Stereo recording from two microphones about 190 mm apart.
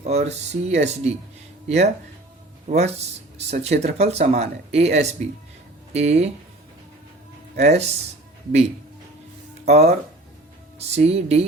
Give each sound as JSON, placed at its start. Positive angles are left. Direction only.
{"t": 0.0, "sound": "speech", "side_deg": -35}
{"t": 7.6, "sound": "speech", "side_deg": -35}
{"t": 9.6, "sound": "speech", "side_deg": -35}